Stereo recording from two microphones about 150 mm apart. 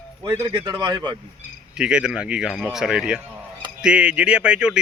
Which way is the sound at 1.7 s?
5° right (ahead or behind).